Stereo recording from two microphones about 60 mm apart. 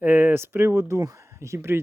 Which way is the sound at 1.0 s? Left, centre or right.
Right.